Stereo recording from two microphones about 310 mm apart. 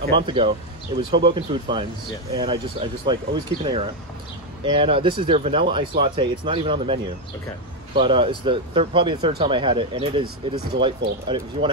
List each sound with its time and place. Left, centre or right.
0.1 s speech: centre